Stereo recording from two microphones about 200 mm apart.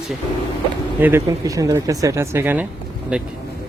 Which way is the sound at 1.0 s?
10° right (ahead or behind).